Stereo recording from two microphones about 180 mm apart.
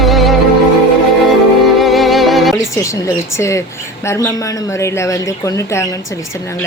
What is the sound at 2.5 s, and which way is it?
Speech, 15° left (ahead or behind).